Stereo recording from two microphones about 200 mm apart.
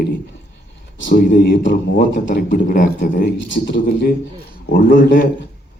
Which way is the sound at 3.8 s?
50° left (ahead or behind).